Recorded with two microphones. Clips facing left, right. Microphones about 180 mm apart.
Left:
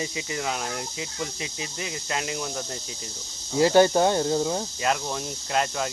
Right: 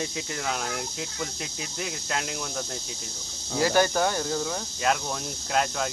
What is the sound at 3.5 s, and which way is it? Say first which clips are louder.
Speech: left 5 dB; 25° left (ahead or behind).